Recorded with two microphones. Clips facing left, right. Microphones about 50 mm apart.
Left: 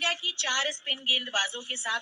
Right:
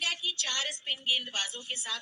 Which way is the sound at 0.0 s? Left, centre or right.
Left.